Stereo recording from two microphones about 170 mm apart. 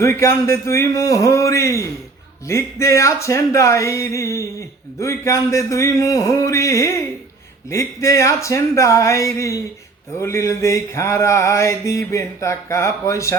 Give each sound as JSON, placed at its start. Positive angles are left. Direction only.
{"t": 0.0, "sound": "mantra", "side_deg": 15}